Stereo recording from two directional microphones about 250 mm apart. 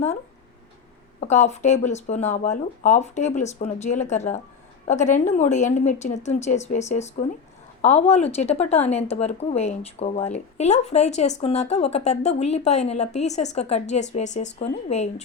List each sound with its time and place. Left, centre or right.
1.2 s a woman's voice: left